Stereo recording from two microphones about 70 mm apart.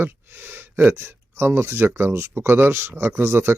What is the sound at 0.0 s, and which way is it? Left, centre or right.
Speech, right.